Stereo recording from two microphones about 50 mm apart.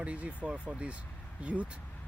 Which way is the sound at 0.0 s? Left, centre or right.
Right.